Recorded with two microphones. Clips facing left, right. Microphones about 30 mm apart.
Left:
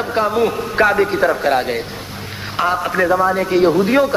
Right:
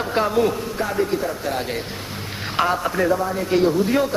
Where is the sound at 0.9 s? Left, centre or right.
Left.